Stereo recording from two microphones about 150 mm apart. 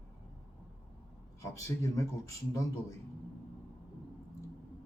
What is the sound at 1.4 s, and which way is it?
Speech, 20° left (ahead or behind).